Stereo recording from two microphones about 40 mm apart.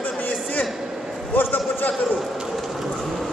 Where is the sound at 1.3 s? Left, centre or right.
Left.